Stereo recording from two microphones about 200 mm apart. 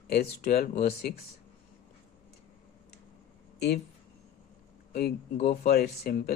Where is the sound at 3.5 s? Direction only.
55° left (ahead or behind).